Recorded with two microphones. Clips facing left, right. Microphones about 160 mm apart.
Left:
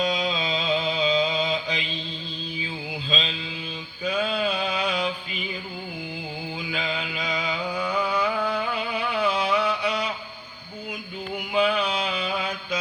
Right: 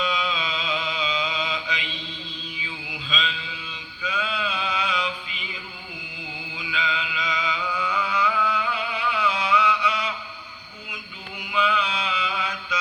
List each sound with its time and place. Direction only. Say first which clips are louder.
0.0 s mantra: left 2 dB; 40° left (ahead or behind)
3.1 s mantra: even; 35° left (ahead or behind)
4.0 s a sound: left 4 dB; 50° left (ahead or behind)
6.6 s mantra: right 2 dB; 50° left (ahead or behind)
8.1 s music: even; 50° left (ahead or behind)
9.8 s mantra: left 1 dB; 50° left (ahead or behind)
11.5 s mantra: left 2 dB; 50° left (ahead or behind)